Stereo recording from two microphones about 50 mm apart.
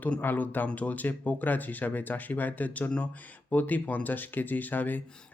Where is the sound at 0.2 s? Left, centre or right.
Left.